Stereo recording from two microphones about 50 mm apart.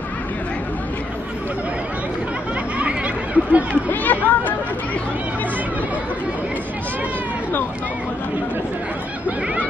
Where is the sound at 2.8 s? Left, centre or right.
Right.